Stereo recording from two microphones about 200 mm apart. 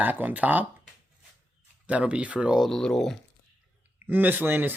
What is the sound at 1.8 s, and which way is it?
Speech, 5° right (ahead or behind).